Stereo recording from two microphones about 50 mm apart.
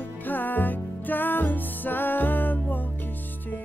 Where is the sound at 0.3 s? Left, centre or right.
Left.